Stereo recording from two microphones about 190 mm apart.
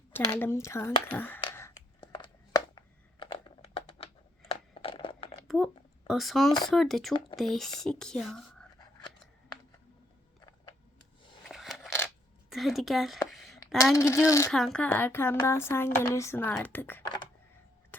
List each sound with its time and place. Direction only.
0.1 s speech: 10° left (ahead or behind)
2.0 s a sound: 25° left (ahead or behind)
5.5 s a sound: centre (ahead or behind)
6.7 s speech: centre (ahead or behind)
11.4 s coin: centre (ahead or behind)
12.5 s a woman's voice: centre (ahead or behind)
13.9 s speech: 15° left (ahead or behind)
14.5 s speech: 5° left (ahead or behind)